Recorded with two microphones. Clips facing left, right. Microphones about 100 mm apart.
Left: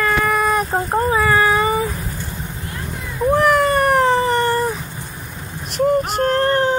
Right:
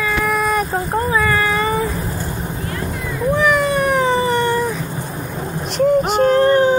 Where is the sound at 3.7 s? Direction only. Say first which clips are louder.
Left 1 dB; 50° left (ahead or behind).